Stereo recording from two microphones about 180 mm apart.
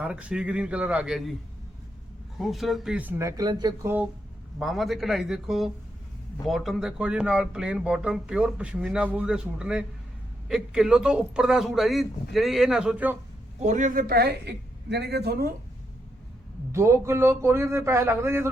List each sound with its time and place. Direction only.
0.0 s speech: 5° right (ahead or behind)
2.4 s speech: centre (ahead or behind); by 3.8 s 20° right (ahead or behind)
3.8 s speech: 10° right (ahead or behind)
13.6 s speech: 40° right (ahead or behind); by 15.4 s 65° right (ahead or behind)
16.7 s speech: 15° right (ahead or behind)